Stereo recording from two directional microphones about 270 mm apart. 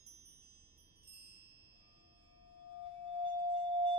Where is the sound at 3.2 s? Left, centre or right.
Centre.